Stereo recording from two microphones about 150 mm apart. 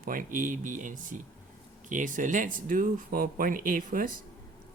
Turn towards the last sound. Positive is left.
turn(degrees=-65)  # may be behind; listen again after turning